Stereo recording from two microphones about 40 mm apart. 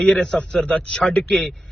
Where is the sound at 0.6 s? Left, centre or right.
Left.